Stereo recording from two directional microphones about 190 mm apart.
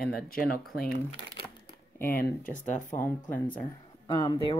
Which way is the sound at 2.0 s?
50° left (ahead or behind).